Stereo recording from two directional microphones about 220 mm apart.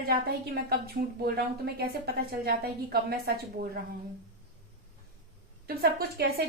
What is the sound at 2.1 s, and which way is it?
A woman's voice, 45° right (ahead or behind).